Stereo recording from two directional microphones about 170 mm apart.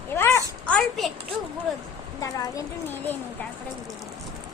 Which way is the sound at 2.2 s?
15° left (ahead or behind).